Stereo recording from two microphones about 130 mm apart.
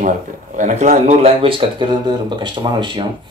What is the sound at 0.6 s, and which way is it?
Speech, 70° right (ahead or behind).